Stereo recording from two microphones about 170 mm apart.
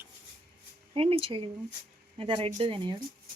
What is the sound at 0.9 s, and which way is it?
Speech, 35° right (ahead or behind).